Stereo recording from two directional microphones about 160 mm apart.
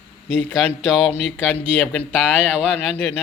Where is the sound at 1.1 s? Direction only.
10° left (ahead or behind).